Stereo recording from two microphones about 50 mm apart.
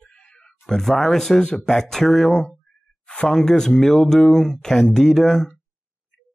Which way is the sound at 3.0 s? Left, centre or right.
Left.